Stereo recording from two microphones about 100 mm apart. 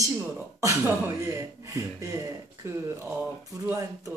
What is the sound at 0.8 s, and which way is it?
Speech, 25° right (ahead or behind).